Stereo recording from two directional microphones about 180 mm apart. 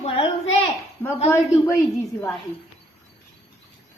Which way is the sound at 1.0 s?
10° left (ahead or behind).